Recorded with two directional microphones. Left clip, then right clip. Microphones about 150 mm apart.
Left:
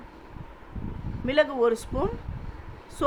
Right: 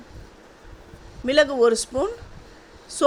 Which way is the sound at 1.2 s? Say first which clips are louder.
Right 5 dB; 30° right (ahead or behind).